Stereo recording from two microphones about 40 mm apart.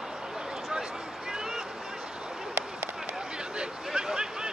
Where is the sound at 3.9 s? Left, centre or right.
Centre.